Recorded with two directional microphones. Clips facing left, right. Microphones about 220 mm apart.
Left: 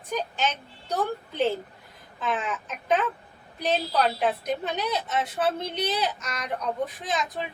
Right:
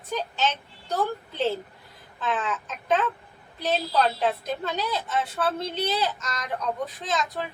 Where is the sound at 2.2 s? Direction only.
15° left (ahead or behind).